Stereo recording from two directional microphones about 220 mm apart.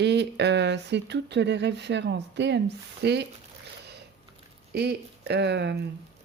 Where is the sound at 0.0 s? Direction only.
50° right (ahead or behind).